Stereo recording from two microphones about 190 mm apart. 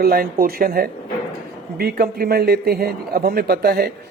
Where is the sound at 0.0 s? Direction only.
50° right (ahead or behind).